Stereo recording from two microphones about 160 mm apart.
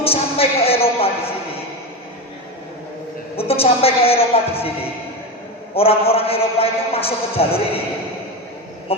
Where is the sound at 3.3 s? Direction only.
35° left (ahead or behind).